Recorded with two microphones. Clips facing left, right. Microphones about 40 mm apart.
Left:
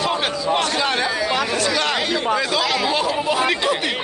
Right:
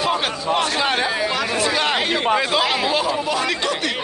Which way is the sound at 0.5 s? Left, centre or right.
Centre.